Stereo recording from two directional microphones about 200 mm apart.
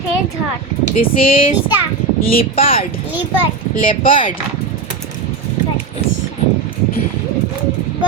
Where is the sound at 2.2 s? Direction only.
45° left (ahead or behind).